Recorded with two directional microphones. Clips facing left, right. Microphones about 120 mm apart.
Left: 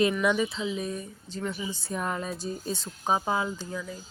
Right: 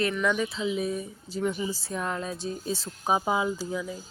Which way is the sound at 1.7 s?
Centre (ahead or behind).